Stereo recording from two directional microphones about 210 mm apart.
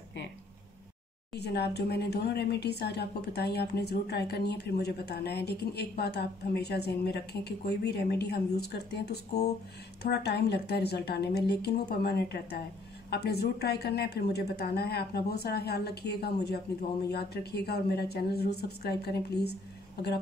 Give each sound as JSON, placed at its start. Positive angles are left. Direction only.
{"t": 1.3, "sound": "speech", "side_deg": 50}